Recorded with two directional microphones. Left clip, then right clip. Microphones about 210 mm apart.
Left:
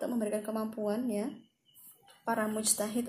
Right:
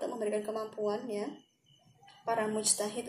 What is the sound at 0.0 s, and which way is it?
Speech, 40° left (ahead or behind).